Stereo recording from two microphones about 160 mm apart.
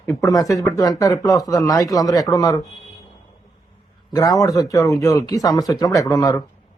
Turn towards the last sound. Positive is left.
turn(degrees=25)  # may be behind; listen again after turning